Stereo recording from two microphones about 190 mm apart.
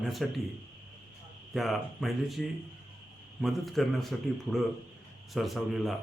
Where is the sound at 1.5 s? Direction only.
Centre (ahead or behind).